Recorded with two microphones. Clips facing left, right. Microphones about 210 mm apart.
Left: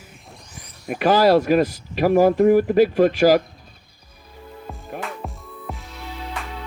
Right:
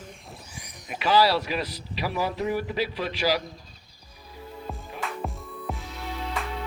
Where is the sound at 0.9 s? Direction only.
50° left (ahead or behind).